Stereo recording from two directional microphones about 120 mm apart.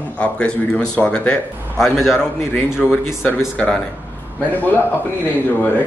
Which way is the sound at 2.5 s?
20° left (ahead or behind).